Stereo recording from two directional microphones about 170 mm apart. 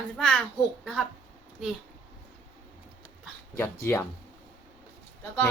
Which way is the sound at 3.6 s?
15° left (ahead or behind).